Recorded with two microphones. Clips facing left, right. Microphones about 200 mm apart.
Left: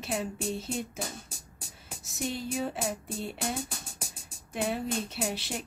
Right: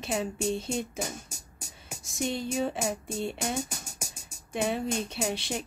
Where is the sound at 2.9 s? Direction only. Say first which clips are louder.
Right 3 dB; 5° left (ahead or behind).